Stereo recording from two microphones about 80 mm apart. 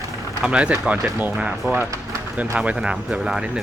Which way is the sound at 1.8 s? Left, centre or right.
Right.